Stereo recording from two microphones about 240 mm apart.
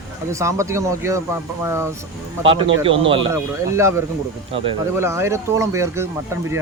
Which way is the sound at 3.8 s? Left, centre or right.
Centre.